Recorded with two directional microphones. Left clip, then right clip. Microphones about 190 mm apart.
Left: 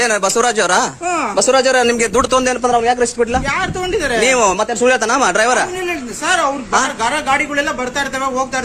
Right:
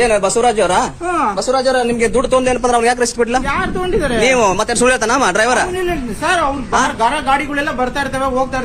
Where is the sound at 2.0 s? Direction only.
35° left (ahead or behind).